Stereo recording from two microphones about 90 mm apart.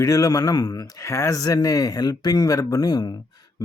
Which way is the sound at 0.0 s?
40° left (ahead or behind).